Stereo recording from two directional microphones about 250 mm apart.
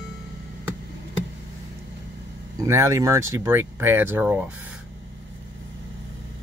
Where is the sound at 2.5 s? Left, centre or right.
Centre.